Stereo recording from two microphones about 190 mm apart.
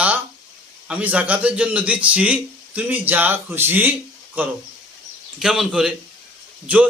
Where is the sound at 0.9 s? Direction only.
5° right (ahead or behind).